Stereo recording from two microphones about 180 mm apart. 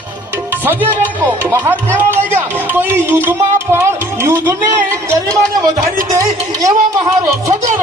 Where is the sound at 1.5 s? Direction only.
15° right (ahead or behind).